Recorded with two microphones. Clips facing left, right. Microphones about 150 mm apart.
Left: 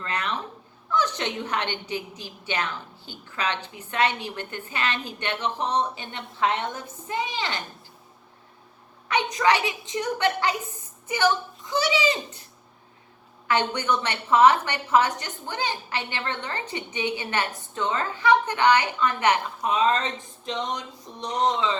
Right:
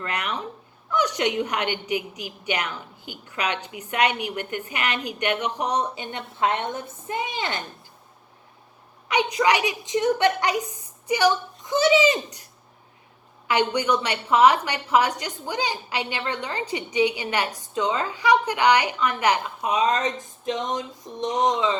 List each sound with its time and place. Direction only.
0.1 s a woman's voice: 15° right (ahead or behind)
9.0 s a woman's voice: 15° right (ahead or behind)
13.5 s a woman's voice: 15° right (ahead or behind)